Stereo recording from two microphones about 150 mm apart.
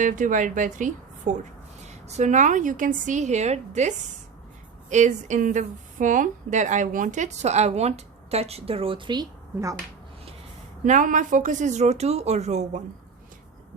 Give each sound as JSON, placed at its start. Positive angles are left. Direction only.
{"t": 0.0, "sound": "a woman's voice", "side_deg": -60}
{"t": 10.8, "sound": "a woman's voice", "side_deg": -55}